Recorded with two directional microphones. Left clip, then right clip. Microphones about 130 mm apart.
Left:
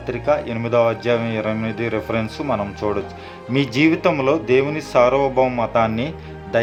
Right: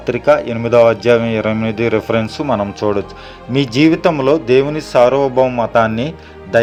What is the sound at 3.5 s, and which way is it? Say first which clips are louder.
Speech: right 5 dB; 25° right (ahead or behind).